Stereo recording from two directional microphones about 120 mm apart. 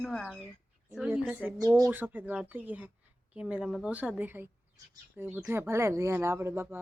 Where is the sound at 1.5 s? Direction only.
30° right (ahead or behind).